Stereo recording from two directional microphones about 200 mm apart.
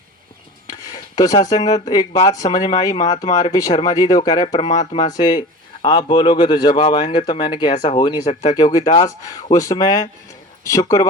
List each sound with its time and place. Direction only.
0.7 s speech: 20° left (ahead or behind)
4.5 s speech: 35° left (ahead or behind)
4.9 s speech: 20° left (ahead or behind)
8.5 s speech: 20° left (ahead or behind)